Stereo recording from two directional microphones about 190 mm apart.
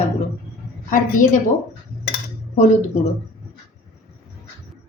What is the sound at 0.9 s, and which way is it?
Speech, 45° left (ahead or behind).